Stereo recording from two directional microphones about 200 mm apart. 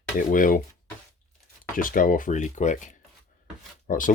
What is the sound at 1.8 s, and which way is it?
Speech, 45° left (ahead or behind).